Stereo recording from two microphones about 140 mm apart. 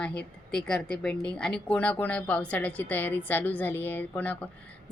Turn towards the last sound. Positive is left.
turn(degrees=10)  # may be behind; listen again after turning